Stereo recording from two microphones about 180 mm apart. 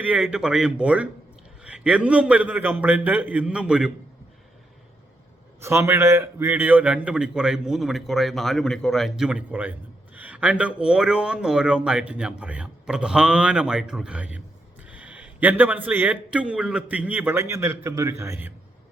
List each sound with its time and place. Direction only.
0.0 s a man's voice: 5° right (ahead or behind)
5.5 s a man's voice: 15° right (ahead or behind)